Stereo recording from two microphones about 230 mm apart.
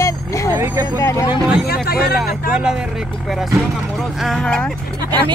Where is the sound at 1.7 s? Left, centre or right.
Left.